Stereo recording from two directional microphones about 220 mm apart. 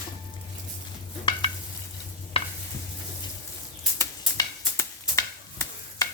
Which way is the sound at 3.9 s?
15° left (ahead or behind).